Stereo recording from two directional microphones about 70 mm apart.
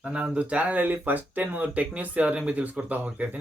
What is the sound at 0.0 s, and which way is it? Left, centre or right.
Speech, centre.